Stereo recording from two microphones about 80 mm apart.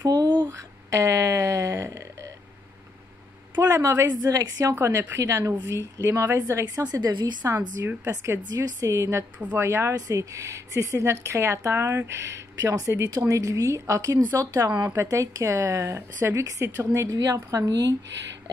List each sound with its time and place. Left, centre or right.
0.0 s a sound: right
0.5 s a sound: right
3.6 s a woman's voice: right
4.1 s a woman's voice: right
4.7 s a woman's voice: right
6.6 s a woman's voice: right
7.4 s a woman's voice: right
9.4 s speech: right
9.7 s a woman's voice: right